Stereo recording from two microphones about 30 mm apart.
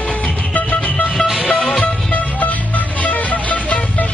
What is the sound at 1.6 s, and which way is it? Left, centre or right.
Music, left.